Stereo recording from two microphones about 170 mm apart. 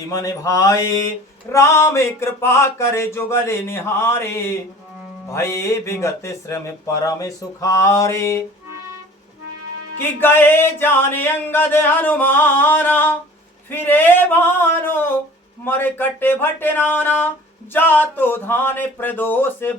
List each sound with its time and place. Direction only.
0.1 s mantra: 20° left (ahead or behind)
1.5 s speech: 15° left (ahead or behind)
10.2 s speech: 10° left (ahead or behind)